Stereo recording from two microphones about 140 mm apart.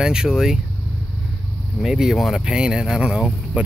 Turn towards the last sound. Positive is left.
turn(degrees=-5)  # may be behind; listen again after turning